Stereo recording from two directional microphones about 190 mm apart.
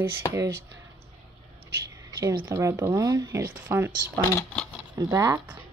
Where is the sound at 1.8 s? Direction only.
15° right (ahead or behind).